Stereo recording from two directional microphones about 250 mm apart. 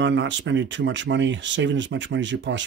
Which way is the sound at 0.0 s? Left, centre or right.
Right.